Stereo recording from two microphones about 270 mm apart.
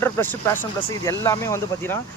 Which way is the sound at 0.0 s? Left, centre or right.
Centre.